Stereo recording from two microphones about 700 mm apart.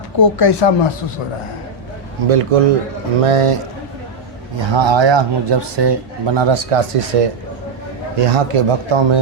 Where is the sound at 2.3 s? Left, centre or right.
Right.